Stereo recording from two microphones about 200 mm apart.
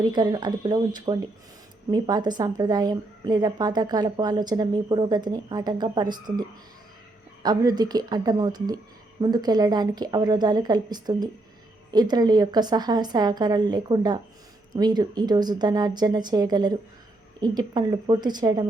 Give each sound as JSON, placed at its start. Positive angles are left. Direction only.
{"t": 0.0, "sound": "a woman's voice", "side_deg": -20}
{"t": 7.4, "sound": "a woman's voice", "side_deg": -20}